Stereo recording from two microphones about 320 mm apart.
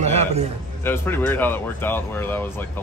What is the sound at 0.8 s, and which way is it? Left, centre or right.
Speech, centre.